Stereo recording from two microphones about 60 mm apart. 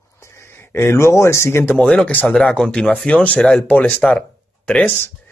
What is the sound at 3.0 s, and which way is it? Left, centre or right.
Speech, centre.